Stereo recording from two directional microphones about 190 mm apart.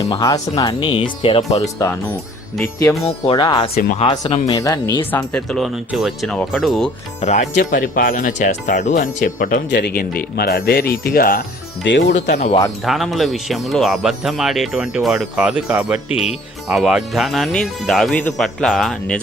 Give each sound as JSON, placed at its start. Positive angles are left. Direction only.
{"t": 0.1, "sound": "speech", "side_deg": 20}
{"t": 3.0, "sound": "speech", "side_deg": 25}
{"t": 5.1, "sound": "speech", "side_deg": 5}
{"t": 7.2, "sound": "speech", "side_deg": 35}
{"t": 9.6, "sound": "speech", "side_deg": 60}
{"t": 11.9, "sound": "speech", "side_deg": 70}
{"t": 12.3, "sound": "speech", "side_deg": 35}
{"t": 12.8, "sound": "speech", "side_deg": 0}